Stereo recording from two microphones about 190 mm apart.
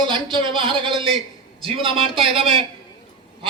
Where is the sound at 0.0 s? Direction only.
25° right (ahead or behind).